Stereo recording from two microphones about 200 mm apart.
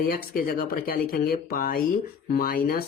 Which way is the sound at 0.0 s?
45° left (ahead or behind).